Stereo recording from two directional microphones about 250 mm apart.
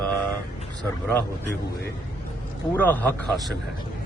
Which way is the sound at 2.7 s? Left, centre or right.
Centre.